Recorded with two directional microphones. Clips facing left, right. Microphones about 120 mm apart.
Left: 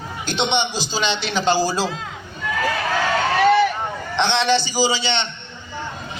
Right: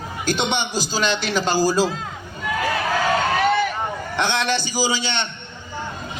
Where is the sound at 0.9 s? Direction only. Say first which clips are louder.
Right 1 dB; 45° right (ahead or behind).